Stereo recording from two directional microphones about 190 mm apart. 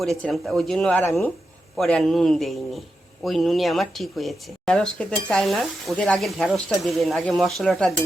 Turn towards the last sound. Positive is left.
turn(degrees=0)  # may be behind; listen again after turning